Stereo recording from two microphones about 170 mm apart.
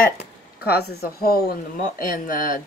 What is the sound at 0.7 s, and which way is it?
A woman's voice, 65° left (ahead or behind).